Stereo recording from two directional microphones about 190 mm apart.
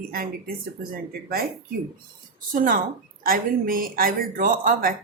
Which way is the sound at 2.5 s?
45° right (ahead or behind).